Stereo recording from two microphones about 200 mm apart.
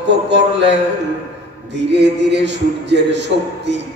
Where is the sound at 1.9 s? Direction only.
60° right (ahead or behind).